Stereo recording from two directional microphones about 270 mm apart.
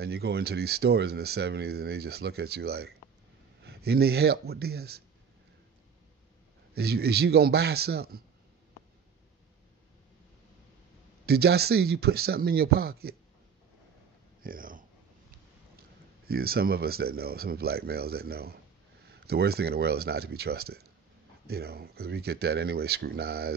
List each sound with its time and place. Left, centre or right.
0.0 s speech: right
6.7 s speech: right
11.2 s speech: right
14.4 s a sound: right
16.3 s speech: right